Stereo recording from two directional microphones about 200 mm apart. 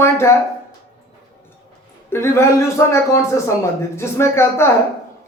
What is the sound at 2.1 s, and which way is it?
Speech, 15° left (ahead or behind).